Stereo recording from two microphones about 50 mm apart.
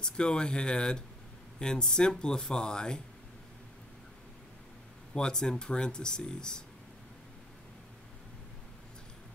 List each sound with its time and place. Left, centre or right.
0.0 s speech: centre
5.1 s speech: centre